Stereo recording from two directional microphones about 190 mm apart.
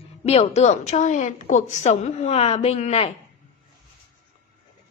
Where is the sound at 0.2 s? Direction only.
35° left (ahead or behind).